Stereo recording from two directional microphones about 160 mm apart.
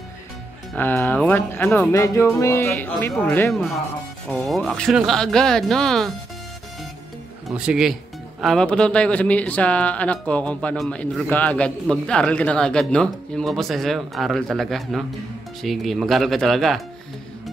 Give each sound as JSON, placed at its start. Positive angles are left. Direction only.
{"t": 0.7, "sound": "speech", "side_deg": 15}
{"t": 7.4, "sound": "speech", "side_deg": -5}